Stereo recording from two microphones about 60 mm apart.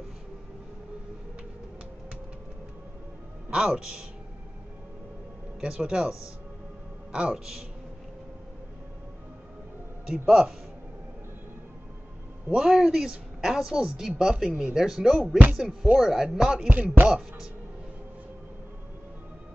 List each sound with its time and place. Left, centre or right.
3.4 s speech: centre
5.6 s speech: centre
10.1 s a man's voice: centre
12.4 s a man's voice: centre
16.6 s music: right